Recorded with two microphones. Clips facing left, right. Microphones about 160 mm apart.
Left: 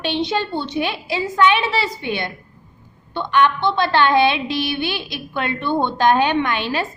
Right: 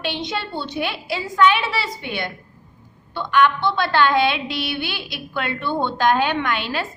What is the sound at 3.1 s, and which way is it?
A woman's voice, 25° left (ahead or behind).